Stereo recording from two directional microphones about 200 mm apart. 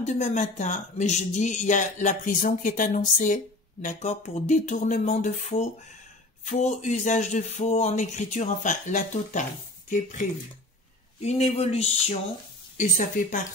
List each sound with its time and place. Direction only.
0.0 s speech: 35° left (ahead or behind)